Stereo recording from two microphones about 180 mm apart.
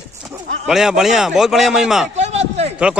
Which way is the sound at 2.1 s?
35° right (ahead or behind).